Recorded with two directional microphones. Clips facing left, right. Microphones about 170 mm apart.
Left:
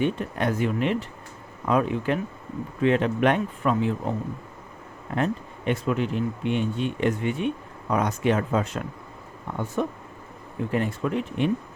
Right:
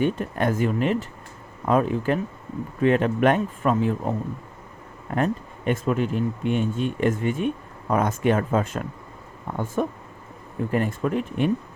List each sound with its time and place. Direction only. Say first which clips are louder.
0.0 s speech: right 2 dB; 45° right (ahead or behind)
5.1 s speech: right 2 dB; 45° right (ahead or behind)